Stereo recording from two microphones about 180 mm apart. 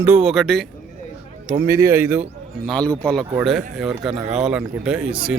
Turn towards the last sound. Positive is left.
turn(degrees=-5)  # may be behind; listen again after turning